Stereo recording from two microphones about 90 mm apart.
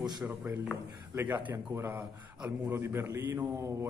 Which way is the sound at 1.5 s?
30° right (ahead or behind).